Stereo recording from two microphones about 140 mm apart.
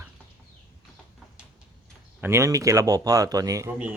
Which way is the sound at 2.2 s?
20° right (ahead or behind).